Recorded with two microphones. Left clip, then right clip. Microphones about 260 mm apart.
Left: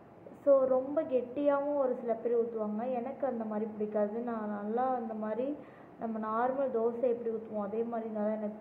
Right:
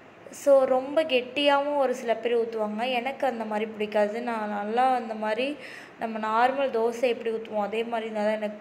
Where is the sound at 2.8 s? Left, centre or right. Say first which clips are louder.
Right 9 dB; centre.